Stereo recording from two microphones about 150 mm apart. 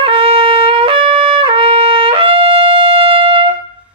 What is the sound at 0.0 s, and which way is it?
Trumpet, 35° right (ahead or behind).